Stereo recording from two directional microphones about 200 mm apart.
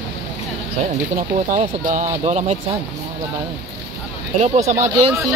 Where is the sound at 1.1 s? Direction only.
45° right (ahead or behind).